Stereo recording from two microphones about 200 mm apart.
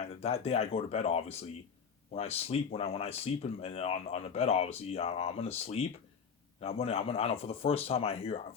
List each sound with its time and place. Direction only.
0.1 s speech: 30° left (ahead or behind)